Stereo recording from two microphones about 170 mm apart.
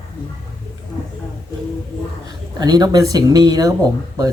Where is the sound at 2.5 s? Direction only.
25° right (ahead or behind).